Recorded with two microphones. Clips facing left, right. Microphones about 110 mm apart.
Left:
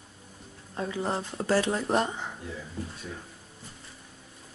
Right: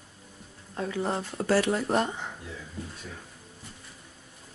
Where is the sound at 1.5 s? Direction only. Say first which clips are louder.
Right 1 dB; 20° left (ahead or behind).